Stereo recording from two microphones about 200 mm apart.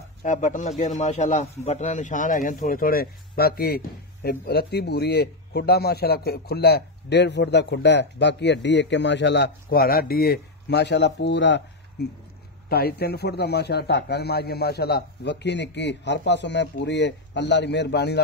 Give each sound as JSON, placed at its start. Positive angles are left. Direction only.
{"t": 0.2, "sound": "a man's voice", "side_deg": 40}
{"t": 12.6, "sound": "a man's voice", "side_deg": 50}